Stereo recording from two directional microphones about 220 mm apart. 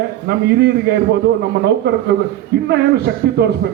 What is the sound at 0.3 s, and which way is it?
A man's voice, 50° right (ahead or behind).